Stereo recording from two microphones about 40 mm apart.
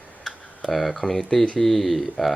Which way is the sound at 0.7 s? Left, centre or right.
Centre.